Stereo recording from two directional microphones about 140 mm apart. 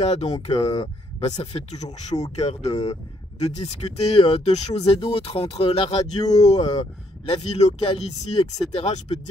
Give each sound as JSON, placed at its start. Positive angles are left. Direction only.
{"t": 0.0, "sound": "speech", "side_deg": 50}